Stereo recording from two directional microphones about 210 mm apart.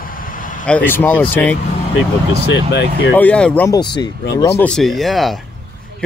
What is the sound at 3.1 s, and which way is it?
Speech, 5° left (ahead or behind).